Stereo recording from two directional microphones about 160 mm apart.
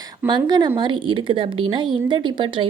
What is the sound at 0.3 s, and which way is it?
A woman's voice, 25° right (ahead or behind).